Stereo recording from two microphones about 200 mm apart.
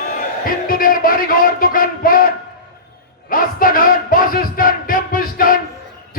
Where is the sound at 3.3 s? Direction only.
45° left (ahead or behind).